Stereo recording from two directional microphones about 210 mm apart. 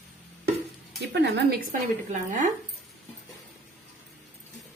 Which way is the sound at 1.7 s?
40° right (ahead or behind).